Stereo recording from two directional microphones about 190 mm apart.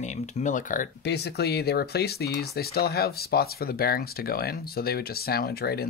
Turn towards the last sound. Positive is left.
turn(degrees=55)  # may be behind; listen again after turning